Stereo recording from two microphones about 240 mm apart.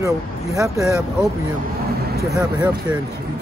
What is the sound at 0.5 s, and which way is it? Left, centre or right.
Speech, centre.